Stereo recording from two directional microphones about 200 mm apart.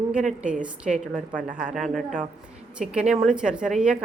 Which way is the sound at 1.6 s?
Centre (ahead or behind).